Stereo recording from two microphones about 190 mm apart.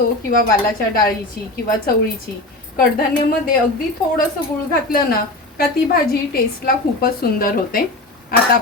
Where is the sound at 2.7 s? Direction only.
50° left (ahead or behind).